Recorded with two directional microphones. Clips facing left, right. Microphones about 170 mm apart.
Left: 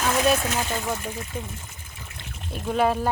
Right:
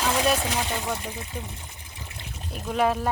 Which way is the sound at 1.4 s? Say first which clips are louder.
Left 2 dB; 15° right (ahead or behind).